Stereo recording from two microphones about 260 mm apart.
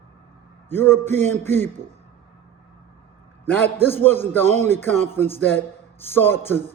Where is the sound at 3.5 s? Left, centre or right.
Centre.